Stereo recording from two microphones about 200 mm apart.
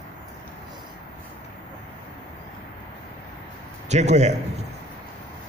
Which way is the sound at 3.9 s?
35° right (ahead or behind).